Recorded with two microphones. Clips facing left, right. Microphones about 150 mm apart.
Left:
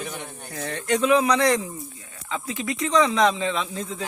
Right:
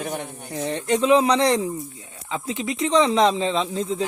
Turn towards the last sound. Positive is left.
turn(degrees=-25)  # may be behind; listen again after turning